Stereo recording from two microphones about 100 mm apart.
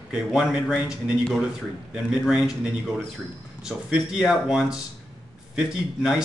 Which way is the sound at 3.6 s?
5° right (ahead or behind).